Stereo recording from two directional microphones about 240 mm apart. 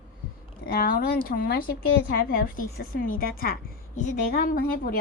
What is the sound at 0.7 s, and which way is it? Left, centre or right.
A woman's voice, left.